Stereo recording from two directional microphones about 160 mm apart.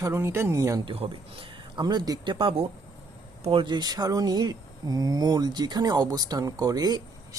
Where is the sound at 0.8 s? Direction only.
35° right (ahead or behind).